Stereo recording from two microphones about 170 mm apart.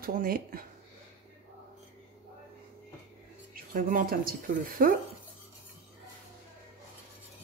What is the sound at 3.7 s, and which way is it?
Speech, 55° right (ahead or behind).